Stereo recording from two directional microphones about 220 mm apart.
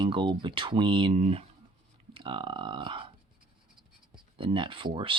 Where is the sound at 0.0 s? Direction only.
20° right (ahead or behind).